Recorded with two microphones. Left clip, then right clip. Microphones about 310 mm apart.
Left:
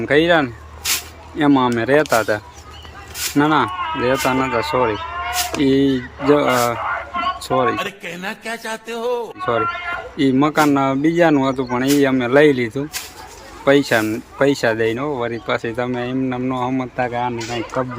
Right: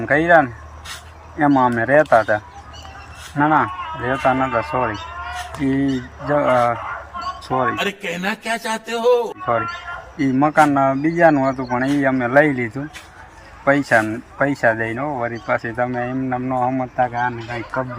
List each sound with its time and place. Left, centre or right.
0.0 s speech: centre
3.7 s a sound: left
4.0 s speech: centre
5.0 s cat: left
5.6 s speech: centre
6.7 s a sound: left
7.5 s speech: centre
9.6 s a sound: left
10.2 s speech: centre